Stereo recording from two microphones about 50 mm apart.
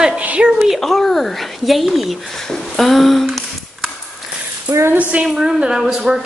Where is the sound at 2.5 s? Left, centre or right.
Centre.